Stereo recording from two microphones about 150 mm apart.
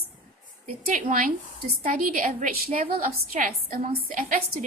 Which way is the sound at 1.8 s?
65° right (ahead or behind).